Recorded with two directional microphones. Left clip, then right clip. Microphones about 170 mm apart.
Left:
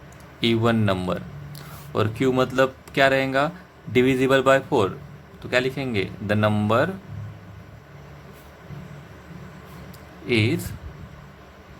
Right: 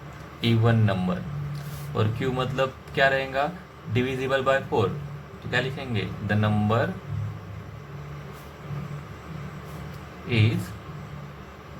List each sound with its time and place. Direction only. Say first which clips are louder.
0.4 s a man's voice: left 4 dB; 65° left (ahead or behind)